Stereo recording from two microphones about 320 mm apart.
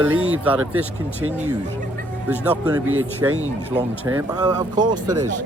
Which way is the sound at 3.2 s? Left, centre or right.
Centre.